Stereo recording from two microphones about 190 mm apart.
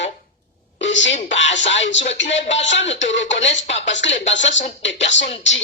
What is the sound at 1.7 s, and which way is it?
Speech, 75° left (ahead or behind).